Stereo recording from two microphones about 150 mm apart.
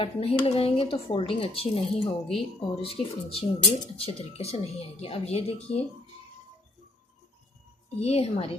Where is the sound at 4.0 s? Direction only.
40° left (ahead or behind).